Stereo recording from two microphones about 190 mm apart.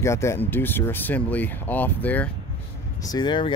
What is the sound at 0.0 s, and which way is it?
Speech, 15° left (ahead or behind).